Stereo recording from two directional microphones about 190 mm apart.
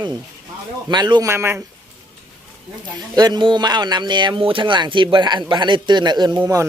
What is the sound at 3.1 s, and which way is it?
Speech, 20° right (ahead or behind).